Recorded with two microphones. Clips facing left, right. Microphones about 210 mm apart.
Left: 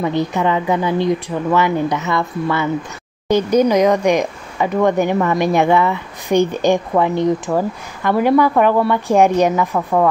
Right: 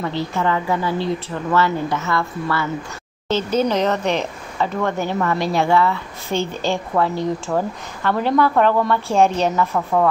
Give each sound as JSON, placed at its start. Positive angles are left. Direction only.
{"t": 0.0, "sound": "speech", "side_deg": 15}